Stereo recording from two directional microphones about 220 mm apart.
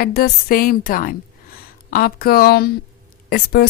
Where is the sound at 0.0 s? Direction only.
45° left (ahead or behind).